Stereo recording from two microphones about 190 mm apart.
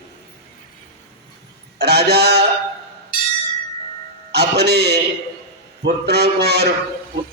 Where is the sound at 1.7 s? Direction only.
60° right (ahead or behind).